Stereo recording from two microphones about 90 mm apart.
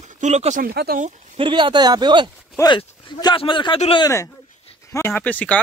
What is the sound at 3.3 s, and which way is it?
Speech, 65° left (ahead or behind).